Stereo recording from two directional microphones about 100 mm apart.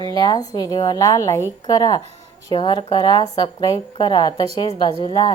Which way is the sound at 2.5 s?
50° left (ahead or behind).